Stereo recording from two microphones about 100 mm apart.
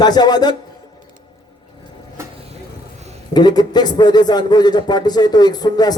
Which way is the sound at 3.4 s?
45° left (ahead or behind).